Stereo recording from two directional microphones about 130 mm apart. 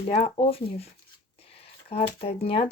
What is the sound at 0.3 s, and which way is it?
Speech, 45° left (ahead or behind).